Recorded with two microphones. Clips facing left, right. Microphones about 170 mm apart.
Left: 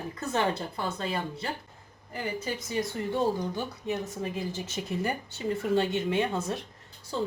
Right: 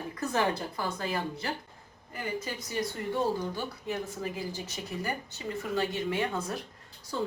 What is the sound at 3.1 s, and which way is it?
Speech, 20° left (ahead or behind).